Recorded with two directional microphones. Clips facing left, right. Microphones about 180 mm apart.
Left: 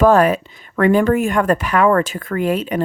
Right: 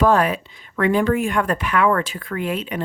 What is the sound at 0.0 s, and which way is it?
Speech, 45° left (ahead or behind).